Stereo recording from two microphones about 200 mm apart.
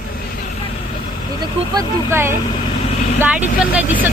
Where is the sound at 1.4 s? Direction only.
15° right (ahead or behind).